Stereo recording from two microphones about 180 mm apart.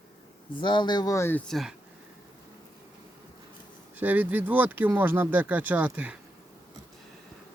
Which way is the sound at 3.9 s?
10° right (ahead or behind).